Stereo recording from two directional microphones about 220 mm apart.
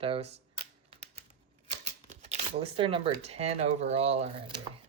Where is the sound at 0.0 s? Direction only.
25° right (ahead or behind).